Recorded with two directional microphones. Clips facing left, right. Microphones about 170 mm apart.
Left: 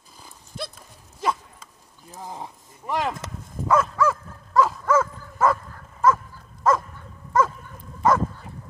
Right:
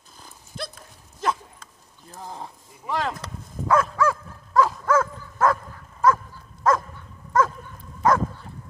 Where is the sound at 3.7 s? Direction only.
Centre (ahead or behind).